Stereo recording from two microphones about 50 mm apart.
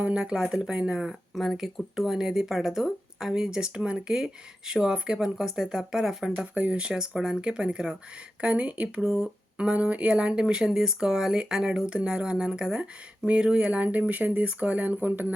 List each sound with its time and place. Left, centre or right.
0.0 s speech: right
1.4 s speech: centre
6.4 s speech: right